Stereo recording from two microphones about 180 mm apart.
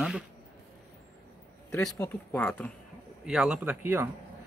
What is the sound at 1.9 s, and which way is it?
Speech, 10° left (ahead or behind).